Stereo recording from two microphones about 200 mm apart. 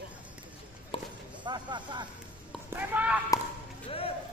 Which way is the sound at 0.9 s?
25° left (ahead or behind).